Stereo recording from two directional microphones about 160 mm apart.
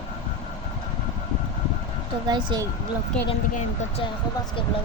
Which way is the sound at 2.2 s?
25° right (ahead or behind).